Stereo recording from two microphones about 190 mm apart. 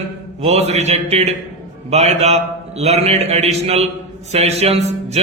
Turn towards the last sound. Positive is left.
turn(degrees=-35)  # may be behind; listen again after turning